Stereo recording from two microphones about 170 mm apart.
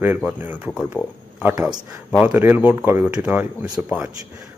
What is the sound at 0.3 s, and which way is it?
Speech, 10° right (ahead or behind).